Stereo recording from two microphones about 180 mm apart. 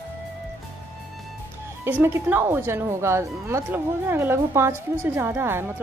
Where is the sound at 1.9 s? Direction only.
10° right (ahead or behind).